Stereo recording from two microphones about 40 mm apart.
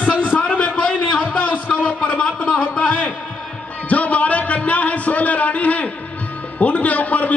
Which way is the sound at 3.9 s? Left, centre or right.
Left.